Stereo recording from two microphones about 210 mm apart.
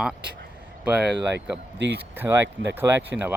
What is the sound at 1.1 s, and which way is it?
Speech, 55° right (ahead or behind).